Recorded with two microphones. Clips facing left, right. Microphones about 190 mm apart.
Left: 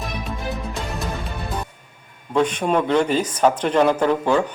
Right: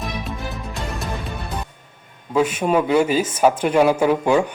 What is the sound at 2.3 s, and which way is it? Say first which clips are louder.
Speech: right 1 dB; 5° right (ahead or behind).